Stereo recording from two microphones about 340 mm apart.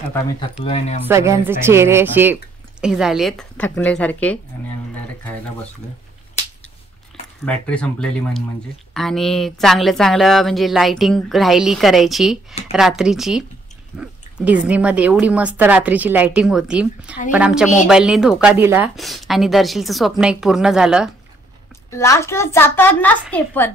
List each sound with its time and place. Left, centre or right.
0.1 s a child's voice: centre
1.0 s speech: centre
7.4 s a child's voice: centre